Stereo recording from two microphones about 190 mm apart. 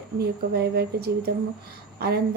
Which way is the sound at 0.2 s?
55° right (ahead or behind).